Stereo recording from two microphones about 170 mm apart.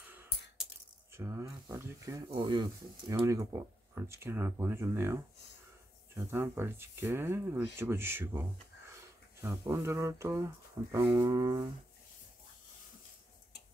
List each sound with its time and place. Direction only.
1.1 s speech: 15° right (ahead or behind)